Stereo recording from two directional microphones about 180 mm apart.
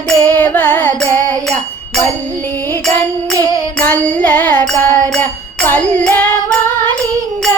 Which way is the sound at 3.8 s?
10° left (ahead or behind).